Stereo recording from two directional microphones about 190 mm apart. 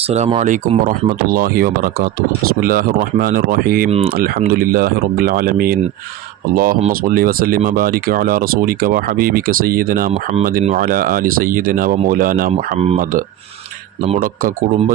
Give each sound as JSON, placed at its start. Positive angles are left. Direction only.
{"t": 0.1, "sound": "speech", "side_deg": -35}
{"t": 3.8, "sound": "speech", "side_deg": -30}
{"t": 4.2, "sound": "speech", "side_deg": -50}